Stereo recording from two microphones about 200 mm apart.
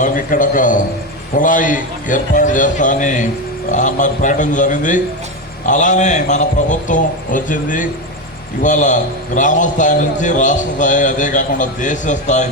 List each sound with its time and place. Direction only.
0.0 s a man's voice: 40° left (ahead or behind)